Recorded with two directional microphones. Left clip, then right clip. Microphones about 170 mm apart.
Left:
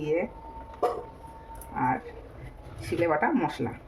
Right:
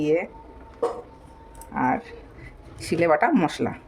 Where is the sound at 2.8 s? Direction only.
90° right.